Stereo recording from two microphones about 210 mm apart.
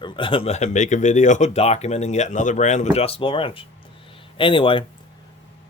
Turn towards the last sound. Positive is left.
turn(degrees=25)  # may be behind; listen again after turning